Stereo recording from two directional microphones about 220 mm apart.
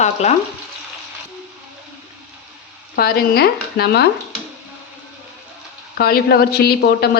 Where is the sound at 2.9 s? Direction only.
45° left (ahead or behind).